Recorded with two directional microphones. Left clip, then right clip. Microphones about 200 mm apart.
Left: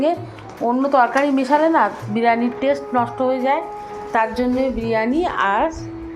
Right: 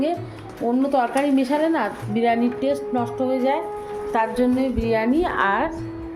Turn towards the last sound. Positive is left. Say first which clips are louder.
# left 2 dB
turn(degrees=-10)  # may be behind; listen again after turning